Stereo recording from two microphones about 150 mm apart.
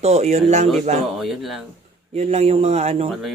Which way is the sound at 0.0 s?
45° right (ahead or behind).